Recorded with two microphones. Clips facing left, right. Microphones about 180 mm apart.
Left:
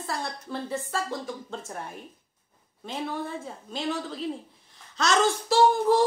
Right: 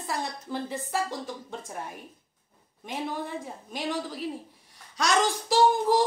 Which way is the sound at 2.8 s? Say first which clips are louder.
Left 1 dB; 15° right (ahead or behind).